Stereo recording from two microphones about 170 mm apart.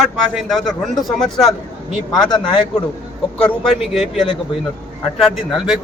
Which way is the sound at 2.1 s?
25° left (ahead or behind).